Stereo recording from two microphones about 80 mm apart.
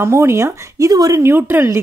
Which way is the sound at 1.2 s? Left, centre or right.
Right.